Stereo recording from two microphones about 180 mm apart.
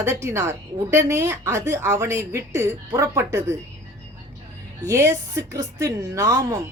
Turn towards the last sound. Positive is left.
turn(degrees=-15)  # may be behind; listen again after turning